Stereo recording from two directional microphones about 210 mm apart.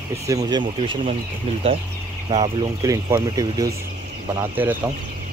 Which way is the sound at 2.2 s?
25° right (ahead or behind).